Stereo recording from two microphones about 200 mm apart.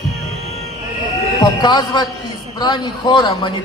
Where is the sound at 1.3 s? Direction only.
20° left (ahead or behind).